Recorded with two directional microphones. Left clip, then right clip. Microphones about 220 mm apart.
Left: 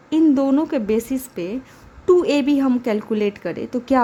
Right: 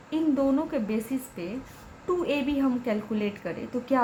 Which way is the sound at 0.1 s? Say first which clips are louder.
Left 9 dB; 45° left (ahead or behind).